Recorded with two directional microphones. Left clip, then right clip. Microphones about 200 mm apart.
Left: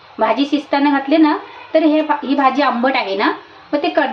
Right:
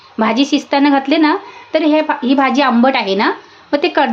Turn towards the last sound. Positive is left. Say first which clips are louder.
# right 2 dB
turn(degrees=-50)  # may be behind; listen again after turning